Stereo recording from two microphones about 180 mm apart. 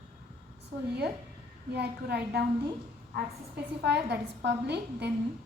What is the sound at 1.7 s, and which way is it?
Speech, 65° right (ahead or behind).